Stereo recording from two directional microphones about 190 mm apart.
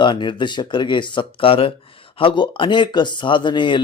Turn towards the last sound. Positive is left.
turn(degrees=25)  # may be behind; listen again after turning